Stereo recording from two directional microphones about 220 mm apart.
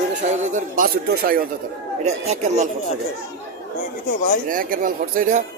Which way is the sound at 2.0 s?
30° right (ahead or behind).